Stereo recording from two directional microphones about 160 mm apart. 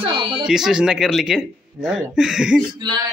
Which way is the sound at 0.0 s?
30° right (ahead or behind).